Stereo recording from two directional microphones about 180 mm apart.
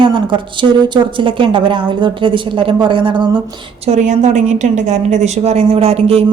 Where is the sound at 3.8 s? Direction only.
40° right (ahead or behind).